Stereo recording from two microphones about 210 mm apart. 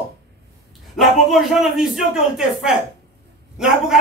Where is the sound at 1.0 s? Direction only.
Centre (ahead or behind).